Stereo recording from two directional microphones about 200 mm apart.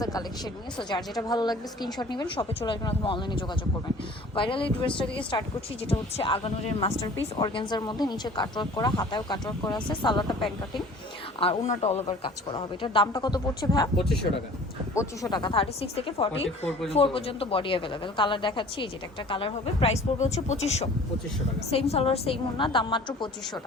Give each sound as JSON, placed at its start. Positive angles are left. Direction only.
{"t": 0.0, "sound": "speech", "side_deg": 20}
{"t": 14.9, "sound": "speech", "side_deg": 20}